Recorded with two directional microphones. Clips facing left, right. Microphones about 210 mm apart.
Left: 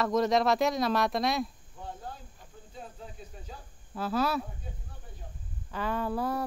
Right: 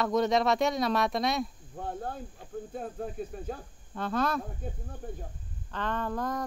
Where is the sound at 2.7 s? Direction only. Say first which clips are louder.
Right 7 dB; 55° right (ahead or behind).